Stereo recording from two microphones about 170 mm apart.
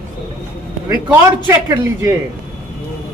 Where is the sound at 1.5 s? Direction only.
20° right (ahead or behind).